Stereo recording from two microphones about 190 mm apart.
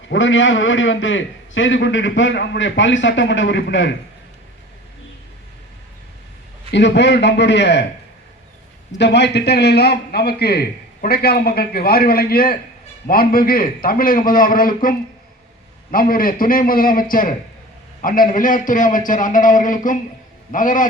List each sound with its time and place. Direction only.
0.1 s a man's voice: 85° left; by 3.9 s 70° left (ahead or behind)
6.7 s a man's voice: 65° left (ahead or behind)
9.0 s a man's voice: 65° left (ahead or behind); by 20.8 s 45° left (ahead or behind)